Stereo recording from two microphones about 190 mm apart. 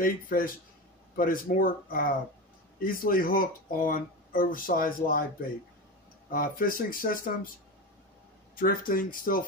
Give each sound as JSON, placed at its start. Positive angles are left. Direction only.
{"t": 0.0, "sound": "speech", "side_deg": 50}
{"t": 6.3, "sound": "speech", "side_deg": 50}
{"t": 8.5, "sound": "speech", "side_deg": 45}